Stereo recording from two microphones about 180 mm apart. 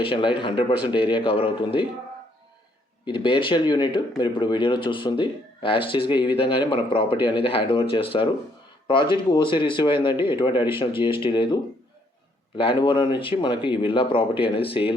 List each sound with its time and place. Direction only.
0.0 s speech: 30° left (ahead or behind)
3.1 s speech: 25° left (ahead or behind)